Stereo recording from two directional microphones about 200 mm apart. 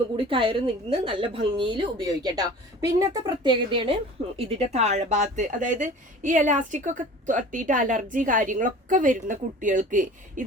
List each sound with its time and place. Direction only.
0.2 s a woman's voice: 25° right (ahead or behind)